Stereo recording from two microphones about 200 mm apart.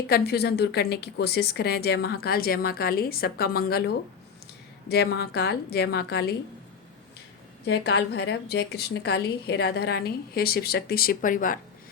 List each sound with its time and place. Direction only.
0.1 s a woman's voice: 55° left (ahead or behind)
7.7 s a woman's voice: 55° left (ahead or behind)